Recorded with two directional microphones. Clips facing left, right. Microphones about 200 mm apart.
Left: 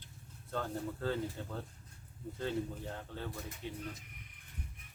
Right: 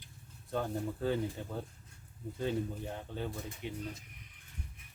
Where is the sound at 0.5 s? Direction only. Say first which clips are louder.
Right 3 dB; 15° right (ahead or behind).